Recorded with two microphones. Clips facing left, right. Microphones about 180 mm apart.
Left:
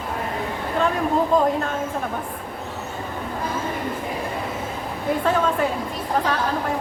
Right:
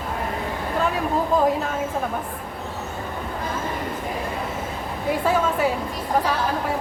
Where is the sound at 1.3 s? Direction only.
5° right (ahead or behind).